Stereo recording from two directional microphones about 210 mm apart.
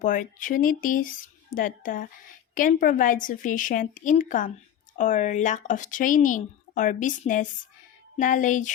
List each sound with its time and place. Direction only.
0.0 s speech: 40° left (ahead or behind)